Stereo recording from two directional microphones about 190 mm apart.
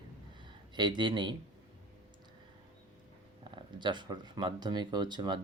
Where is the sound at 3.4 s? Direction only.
25° right (ahead or behind).